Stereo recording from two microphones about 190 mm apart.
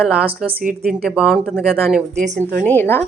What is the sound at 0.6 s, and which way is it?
Speech, 50° right (ahead or behind).